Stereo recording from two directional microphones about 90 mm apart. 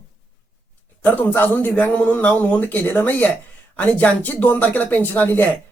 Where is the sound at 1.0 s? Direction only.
20° left (ahead or behind).